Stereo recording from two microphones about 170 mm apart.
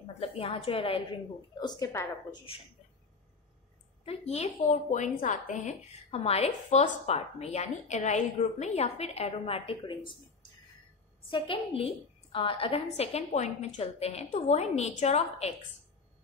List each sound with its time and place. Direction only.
0.2 s a woman's voice: 35° left (ahead or behind)
1.6 s a woman's voice: 20° left (ahead or behind)
4.0 s a woman's voice: 40° left (ahead or behind)
11.2 s a woman's voice: 30° left (ahead or behind)